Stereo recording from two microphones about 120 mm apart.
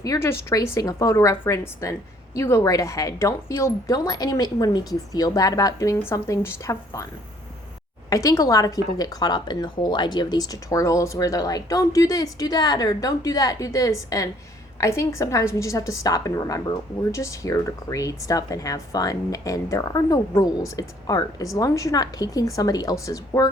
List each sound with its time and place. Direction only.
0.0 s a woman's voice: 25° left (ahead or behind)
8.1 s a woman's voice: 30° left (ahead or behind)